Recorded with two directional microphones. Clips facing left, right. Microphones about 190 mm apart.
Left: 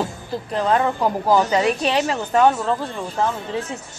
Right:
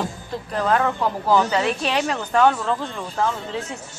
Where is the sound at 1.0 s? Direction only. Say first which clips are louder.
Left 2 dB; 15° left (ahead or behind).